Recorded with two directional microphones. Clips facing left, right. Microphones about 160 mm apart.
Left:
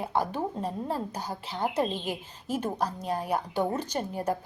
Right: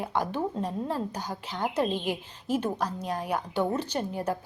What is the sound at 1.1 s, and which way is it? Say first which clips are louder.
Speech: even; 10° left (ahead or behind).